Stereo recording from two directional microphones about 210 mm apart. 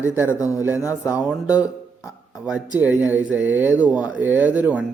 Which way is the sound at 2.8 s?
5° right (ahead or behind).